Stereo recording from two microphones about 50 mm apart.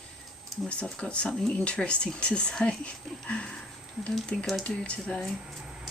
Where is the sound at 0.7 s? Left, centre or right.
Left.